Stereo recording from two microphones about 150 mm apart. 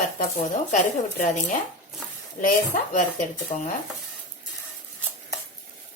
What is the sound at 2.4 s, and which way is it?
Speech, 60° left (ahead or behind).